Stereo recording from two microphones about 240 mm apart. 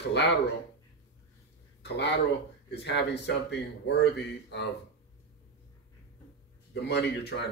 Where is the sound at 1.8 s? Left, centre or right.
Left.